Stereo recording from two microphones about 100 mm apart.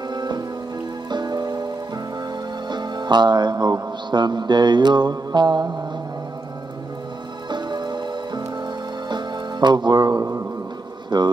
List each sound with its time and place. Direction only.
0.1 s music: 45° right (ahead or behind)
2.7 s speech: 50° right (ahead or behind)
7.4 s music: 50° right (ahead or behind)
11.1 s speech: 45° right (ahead or behind)